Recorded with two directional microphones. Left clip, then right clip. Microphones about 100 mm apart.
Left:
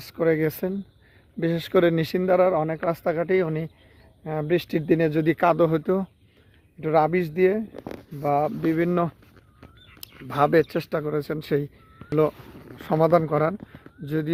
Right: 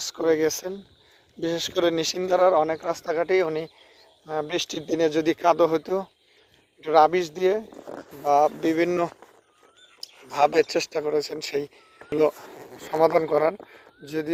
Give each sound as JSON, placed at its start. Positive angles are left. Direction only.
{"t": 0.0, "sound": "speech", "side_deg": 20}
{"t": 8.2, "sound": "speech", "side_deg": 5}
{"t": 8.7, "sound": "speech", "side_deg": -10}
{"t": 10.2, "sound": "speech", "side_deg": -10}
{"t": 13.0, "sound": "speech", "side_deg": 10}